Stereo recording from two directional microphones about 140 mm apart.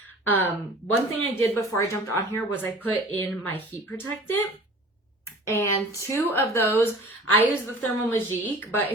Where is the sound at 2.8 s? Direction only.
15° left (ahead or behind).